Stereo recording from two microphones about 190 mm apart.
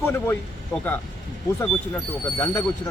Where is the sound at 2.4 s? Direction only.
15° left (ahead or behind).